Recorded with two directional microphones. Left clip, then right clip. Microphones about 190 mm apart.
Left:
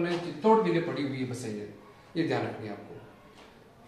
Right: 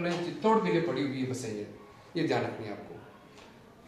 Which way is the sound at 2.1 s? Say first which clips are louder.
Left 1 dB; 30° right (ahead or behind).